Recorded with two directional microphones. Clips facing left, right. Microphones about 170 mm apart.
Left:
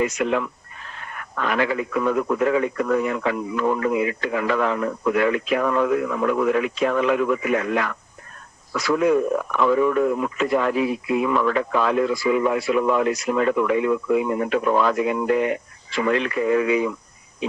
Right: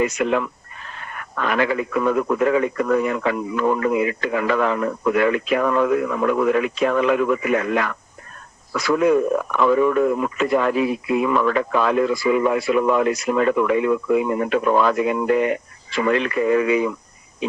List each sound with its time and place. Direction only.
0.0 s speech: 60° right (ahead or behind)